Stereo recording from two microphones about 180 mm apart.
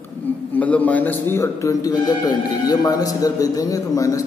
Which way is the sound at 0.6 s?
10° left (ahead or behind).